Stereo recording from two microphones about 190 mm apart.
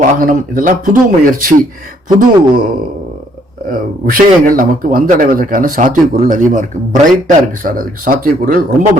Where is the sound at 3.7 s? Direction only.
50° right (ahead or behind).